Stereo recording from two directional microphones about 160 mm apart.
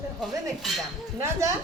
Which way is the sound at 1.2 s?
20° right (ahead or behind).